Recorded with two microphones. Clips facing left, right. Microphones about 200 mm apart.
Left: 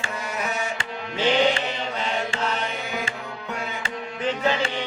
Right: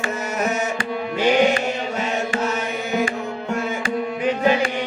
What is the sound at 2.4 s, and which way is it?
Music, 45° right (ahead or behind).